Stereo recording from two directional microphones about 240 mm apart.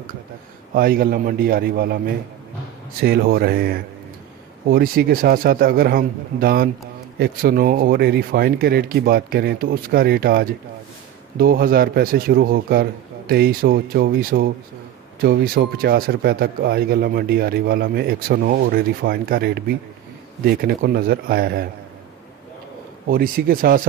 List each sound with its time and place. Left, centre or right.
0.7 s speech: right
23.0 s speech: right